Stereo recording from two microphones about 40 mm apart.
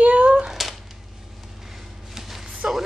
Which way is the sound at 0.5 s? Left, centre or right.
Centre.